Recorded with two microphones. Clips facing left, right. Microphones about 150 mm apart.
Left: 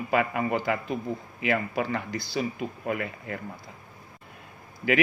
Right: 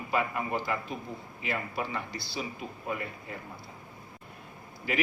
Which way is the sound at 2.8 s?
70° left (ahead or behind).